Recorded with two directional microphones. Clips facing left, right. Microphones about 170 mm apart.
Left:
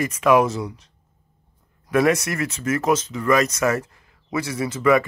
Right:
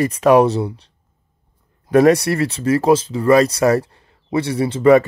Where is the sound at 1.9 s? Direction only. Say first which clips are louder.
Right 7 dB; 35° right (ahead or behind).